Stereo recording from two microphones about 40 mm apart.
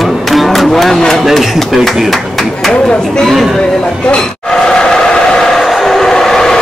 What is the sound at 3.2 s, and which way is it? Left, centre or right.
Chatter, centre.